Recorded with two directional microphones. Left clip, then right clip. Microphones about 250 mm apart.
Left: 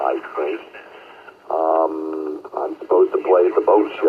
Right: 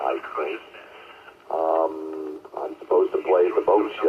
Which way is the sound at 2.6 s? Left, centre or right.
Left.